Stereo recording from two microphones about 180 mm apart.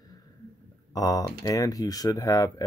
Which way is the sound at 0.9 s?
20° left (ahead or behind).